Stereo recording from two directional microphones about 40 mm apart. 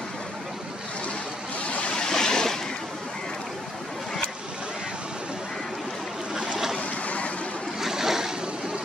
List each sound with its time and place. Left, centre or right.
1.7 s waves: left
2.0 s waves: centre
6.3 s boat: centre
6.8 s boat: left
7.8 s waves: centre